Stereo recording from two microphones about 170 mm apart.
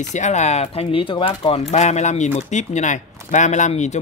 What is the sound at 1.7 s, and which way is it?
Speech, 40° left (ahead or behind).